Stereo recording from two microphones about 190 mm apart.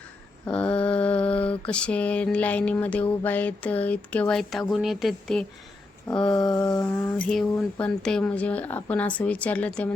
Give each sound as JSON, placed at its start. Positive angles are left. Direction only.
{"t": 0.4, "sound": "mantra", "side_deg": 5}
{"t": 1.6, "sound": "speech", "side_deg": 5}
{"t": 6.1, "sound": "a sound", "side_deg": 20}
{"t": 6.6, "sound": "speech", "side_deg": 15}